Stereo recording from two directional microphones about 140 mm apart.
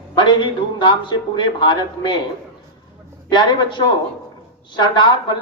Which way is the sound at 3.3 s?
30° left (ahead or behind).